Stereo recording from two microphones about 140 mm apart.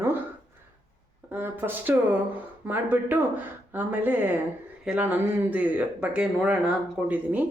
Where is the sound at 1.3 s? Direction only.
15° right (ahead or behind).